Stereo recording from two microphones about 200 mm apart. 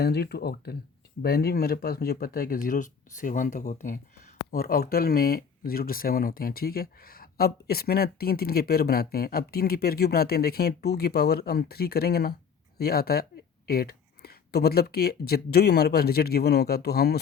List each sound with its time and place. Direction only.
0.0 s speech: 55° left (ahead or behind)